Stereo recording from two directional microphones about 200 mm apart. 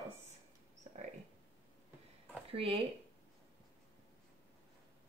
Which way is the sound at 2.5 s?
30° right (ahead or behind).